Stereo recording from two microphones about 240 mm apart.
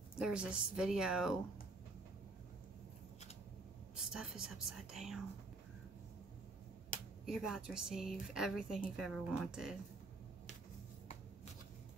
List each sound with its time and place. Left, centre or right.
0.2 s speech: centre
3.9 s speech: centre
6.9 s finger snapping: left
7.2 s speech: centre